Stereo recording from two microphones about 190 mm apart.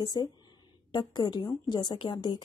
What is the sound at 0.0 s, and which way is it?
A woman's voice, 20° left (ahead or behind).